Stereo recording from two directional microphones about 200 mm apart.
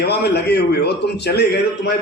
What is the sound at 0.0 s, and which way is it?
A man's voice, 55° left (ahead or behind).